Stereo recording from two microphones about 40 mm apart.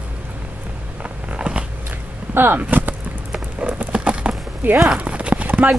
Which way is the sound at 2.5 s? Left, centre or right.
Right.